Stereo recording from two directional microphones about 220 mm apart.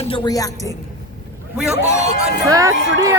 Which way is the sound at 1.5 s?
5° right (ahead or behind).